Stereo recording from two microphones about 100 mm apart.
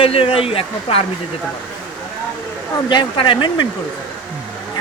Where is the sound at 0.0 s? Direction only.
70° left (ahead or behind).